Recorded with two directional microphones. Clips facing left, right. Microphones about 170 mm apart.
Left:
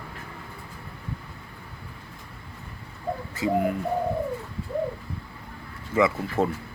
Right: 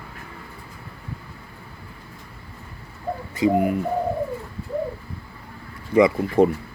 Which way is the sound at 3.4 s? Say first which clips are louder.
Right 6 dB; 20° right (ahead or behind).